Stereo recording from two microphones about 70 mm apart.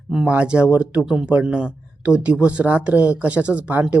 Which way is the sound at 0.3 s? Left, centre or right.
Centre.